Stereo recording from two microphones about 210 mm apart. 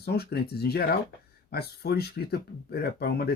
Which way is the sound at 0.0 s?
50° left (ahead or behind).